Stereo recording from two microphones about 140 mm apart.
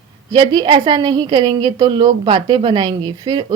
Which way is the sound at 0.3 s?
30° right (ahead or behind).